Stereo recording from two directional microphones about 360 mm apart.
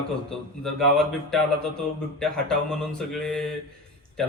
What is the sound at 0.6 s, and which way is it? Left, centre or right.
Speech, centre.